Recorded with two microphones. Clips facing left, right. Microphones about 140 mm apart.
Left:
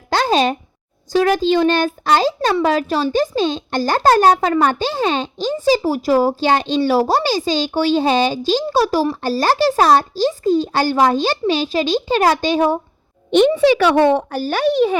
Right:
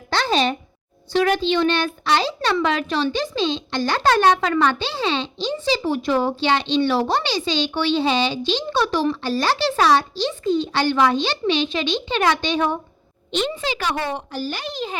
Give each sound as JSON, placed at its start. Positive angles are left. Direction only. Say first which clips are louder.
{"t": 0.1, "sound": "a sound", "louder": "left 4 dB", "side_deg": 40}
{"t": 1.1, "sound": "a child's voice", "louder": "left 4 dB", "side_deg": 40}
{"t": 13.8, "sound": "speech", "louder": "left 12 dB", "side_deg": 65}